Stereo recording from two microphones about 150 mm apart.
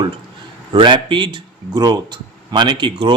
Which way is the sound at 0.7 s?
35° right (ahead or behind).